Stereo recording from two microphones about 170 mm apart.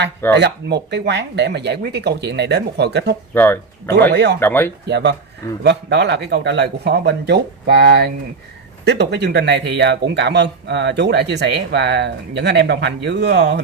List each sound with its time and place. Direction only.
0.4 s speech: 80° right
3.3 s speech: 10° left (ahead or behind)
4.1 s speech: 75° right (ahead or behind)
4.4 s speech: 10° left (ahead or behind)
4.8 s speech: 80° right